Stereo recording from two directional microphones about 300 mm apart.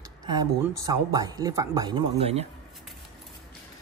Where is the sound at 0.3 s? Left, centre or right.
Centre.